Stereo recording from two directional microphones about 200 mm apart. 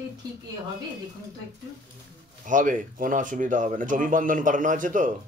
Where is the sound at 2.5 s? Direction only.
40° right (ahead or behind).